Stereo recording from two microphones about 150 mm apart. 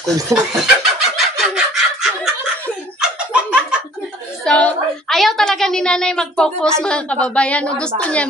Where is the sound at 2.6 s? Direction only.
5° right (ahead or behind).